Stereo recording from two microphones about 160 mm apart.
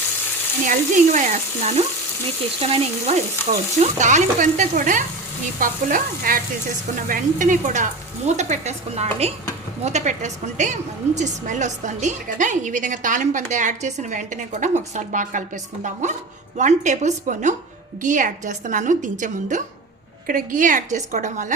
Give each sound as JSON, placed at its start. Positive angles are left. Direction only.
{"t": 0.6, "sound": "a woman's voice", "side_deg": -50}
{"t": 2.6, "sound": "speech", "side_deg": -35}
{"t": 3.8, "sound": "a woman's voice", "side_deg": -50}
{"t": 5.5, "sound": "frying", "side_deg": -60}
{"t": 7.1, "sound": "a woman's voice", "side_deg": -55}